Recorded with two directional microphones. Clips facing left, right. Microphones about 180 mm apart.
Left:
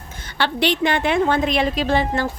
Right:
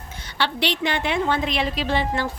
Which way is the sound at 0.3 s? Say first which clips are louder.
Left 4 dB; 50° left (ahead or behind).